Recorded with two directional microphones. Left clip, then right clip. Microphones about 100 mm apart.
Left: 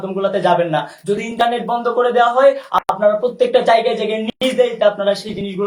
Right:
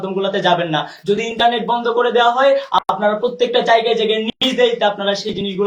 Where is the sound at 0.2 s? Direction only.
40° left (ahead or behind).